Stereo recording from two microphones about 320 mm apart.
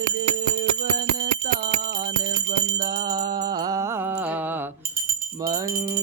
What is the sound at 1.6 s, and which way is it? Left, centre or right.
Jingle bell, right.